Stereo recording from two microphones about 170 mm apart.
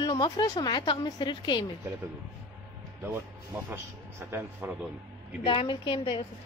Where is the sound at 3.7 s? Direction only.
15° right (ahead or behind).